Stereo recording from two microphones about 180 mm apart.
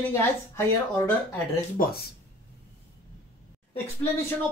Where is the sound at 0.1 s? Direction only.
15° left (ahead or behind).